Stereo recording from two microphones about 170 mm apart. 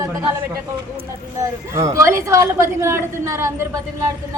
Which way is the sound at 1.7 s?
20° right (ahead or behind).